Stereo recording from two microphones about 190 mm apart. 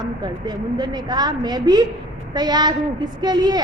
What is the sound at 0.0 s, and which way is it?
A woman's voice, 20° right (ahead or behind).